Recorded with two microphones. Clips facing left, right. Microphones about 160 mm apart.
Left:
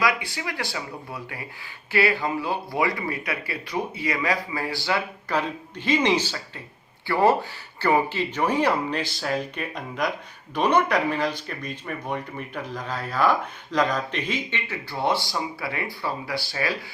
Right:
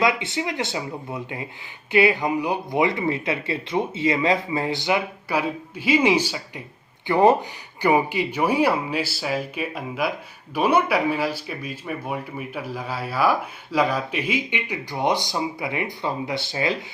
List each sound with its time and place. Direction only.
0.0 s speech: 25° right (ahead or behind)